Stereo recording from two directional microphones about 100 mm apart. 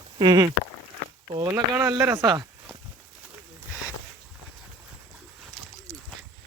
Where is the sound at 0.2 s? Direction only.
50° right (ahead or behind).